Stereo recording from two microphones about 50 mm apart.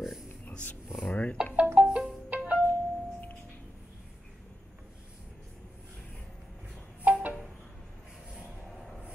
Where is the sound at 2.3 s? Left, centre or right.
Right.